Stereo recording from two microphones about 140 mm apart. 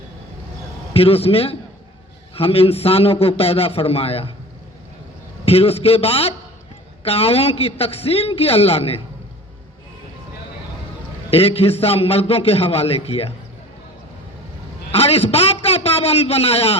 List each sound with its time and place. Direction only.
0.9 s a man's voice: 45° left (ahead or behind)
5.5 s a man's voice: 45° left (ahead or behind)
11.3 s a man's voice: 45° left (ahead or behind)
14.9 s a man's voice: 45° left (ahead or behind)